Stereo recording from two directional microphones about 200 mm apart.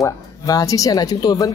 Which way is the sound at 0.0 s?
15° left (ahead or behind).